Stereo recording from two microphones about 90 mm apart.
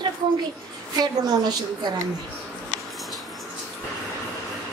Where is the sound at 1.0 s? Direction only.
50° right (ahead or behind).